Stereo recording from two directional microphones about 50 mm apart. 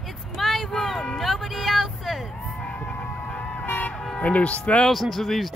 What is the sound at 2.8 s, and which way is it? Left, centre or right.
Music, left.